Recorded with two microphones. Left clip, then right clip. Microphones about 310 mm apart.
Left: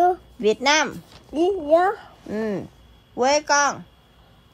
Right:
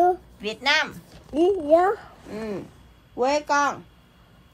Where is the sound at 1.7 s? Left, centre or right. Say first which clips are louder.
Left 1 dB; centre.